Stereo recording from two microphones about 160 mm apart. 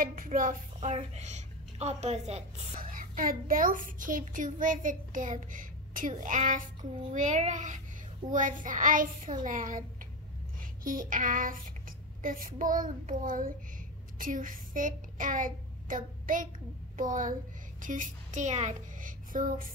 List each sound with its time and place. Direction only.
0.0 s a woman's voice: 60° right (ahead or behind); by 2.6 s 45° right (ahead or behind)
2.8 s a child's voice: 60° right (ahead or behind)
10.6 s child singing: 60° right (ahead or behind)
12.2 s a child's voice: 60° right (ahead or behind)